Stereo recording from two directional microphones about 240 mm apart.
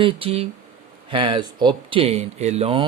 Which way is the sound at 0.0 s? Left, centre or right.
Right.